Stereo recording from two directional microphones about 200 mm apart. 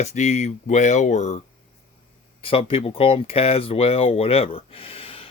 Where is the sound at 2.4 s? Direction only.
25° left (ahead or behind).